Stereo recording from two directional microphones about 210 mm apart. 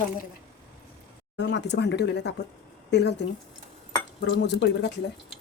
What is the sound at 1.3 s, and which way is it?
Speech, 55° left (ahead or behind).